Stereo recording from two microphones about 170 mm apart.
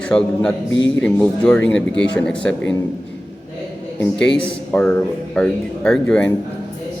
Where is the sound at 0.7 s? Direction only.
90° left.